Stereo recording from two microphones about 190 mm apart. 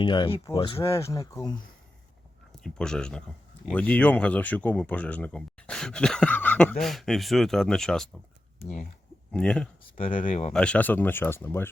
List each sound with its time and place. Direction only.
0.0 s speech: 25° left (ahead or behind)
0.8 s speech: 15° left (ahead or behind)
2.6 s speech: 5° left (ahead or behind)
9.3 s speech: 5° left (ahead or behind)
10.2 s speech: 35° left (ahead or behind)
10.5 s speech: 5° left (ahead or behind)